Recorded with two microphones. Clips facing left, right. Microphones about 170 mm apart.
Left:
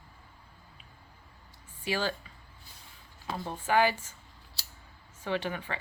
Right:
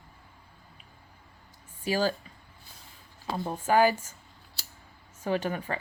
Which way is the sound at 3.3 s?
40° right (ahead or behind).